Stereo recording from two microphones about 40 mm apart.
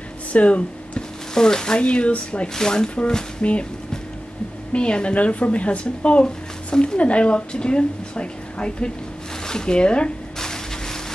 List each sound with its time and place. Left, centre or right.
0.3 s a sound: left
1.3 s speech: centre; by 2.5 s left
2.5 s speech: centre
3.4 s speech: left
4.7 s speech: left
7.0 s speech: left
10.4 s a sound: centre